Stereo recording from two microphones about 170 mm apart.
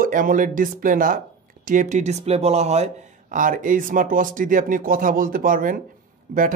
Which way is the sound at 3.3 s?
50° right (ahead or behind).